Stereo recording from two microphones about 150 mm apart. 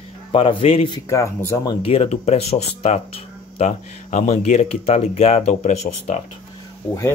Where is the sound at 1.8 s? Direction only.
45° left (ahead or behind).